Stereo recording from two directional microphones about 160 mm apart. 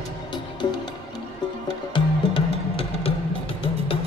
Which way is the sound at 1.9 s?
35° left (ahead or behind).